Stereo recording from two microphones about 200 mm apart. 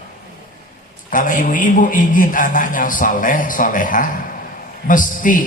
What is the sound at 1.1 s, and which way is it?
A man's voice, 40° left (ahead or behind).